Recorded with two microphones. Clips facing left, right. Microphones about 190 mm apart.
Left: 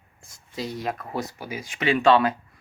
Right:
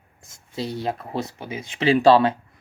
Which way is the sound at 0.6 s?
30° right (ahead or behind).